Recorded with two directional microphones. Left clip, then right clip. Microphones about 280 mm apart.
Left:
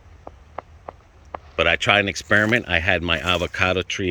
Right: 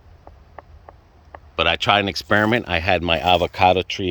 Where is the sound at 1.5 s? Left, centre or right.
Centre.